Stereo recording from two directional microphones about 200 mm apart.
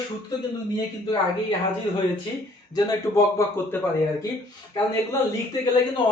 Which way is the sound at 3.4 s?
15° left (ahead or behind).